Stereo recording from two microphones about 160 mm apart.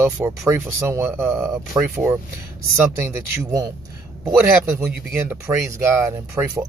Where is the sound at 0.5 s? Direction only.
15° right (ahead or behind).